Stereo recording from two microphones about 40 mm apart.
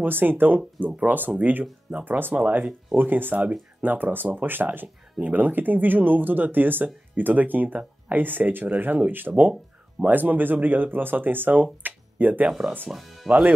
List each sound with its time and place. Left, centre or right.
0.0 s speech: right
2.0 s speech: right
2.3 s speech: right
2.9 s speech: right
9.3 s speech: right
11.8 s a sound: right
12.9 s speech: centre